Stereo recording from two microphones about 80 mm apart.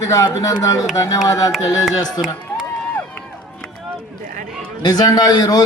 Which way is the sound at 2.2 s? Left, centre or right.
Centre.